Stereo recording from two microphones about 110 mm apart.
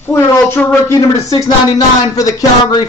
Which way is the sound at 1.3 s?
35° left (ahead or behind).